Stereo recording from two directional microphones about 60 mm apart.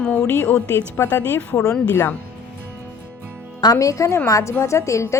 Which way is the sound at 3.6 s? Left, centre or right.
Left.